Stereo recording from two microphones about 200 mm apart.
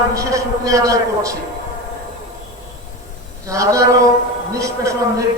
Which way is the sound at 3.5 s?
15° right (ahead or behind).